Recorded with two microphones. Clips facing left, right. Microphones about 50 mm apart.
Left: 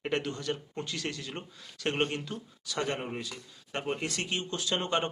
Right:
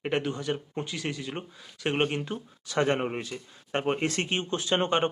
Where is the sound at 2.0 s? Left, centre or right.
Right.